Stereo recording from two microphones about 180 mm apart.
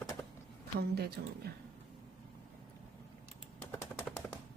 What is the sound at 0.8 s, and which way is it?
Speech, 60° right (ahead or behind).